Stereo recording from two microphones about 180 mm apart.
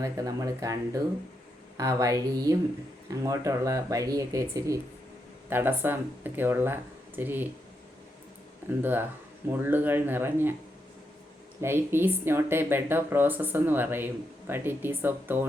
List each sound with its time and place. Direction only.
0.0 s speech: 20° right (ahead or behind)
8.8 s speech: 10° right (ahead or behind)
11.6 s speech: 10° right (ahead or behind)